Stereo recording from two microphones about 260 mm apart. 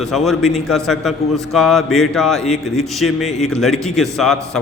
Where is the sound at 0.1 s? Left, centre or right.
Centre.